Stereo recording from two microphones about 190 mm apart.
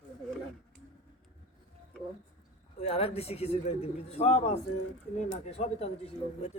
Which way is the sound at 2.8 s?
30° left (ahead or behind).